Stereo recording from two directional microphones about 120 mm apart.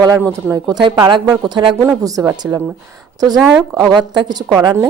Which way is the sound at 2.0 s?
30° right (ahead or behind).